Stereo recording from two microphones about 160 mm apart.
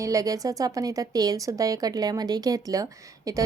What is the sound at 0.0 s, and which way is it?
A woman's voice, 20° right (ahead or behind).